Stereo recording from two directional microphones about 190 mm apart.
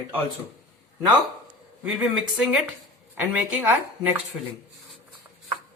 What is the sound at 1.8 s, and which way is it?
Speech, 5° right (ahead or behind).